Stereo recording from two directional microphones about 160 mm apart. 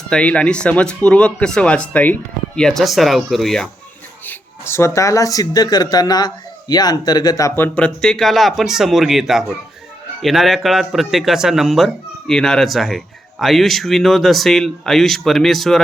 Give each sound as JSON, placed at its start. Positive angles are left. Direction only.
{"t": 0.1, "sound": "speech", "side_deg": 5}
{"t": 4.3, "sound": "speech", "side_deg": 15}